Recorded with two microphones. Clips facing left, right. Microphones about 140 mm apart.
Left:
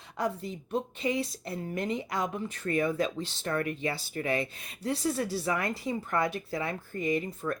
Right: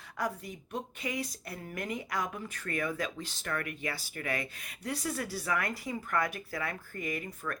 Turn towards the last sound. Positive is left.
turn(degrees=25)  # may be behind; listen again after turning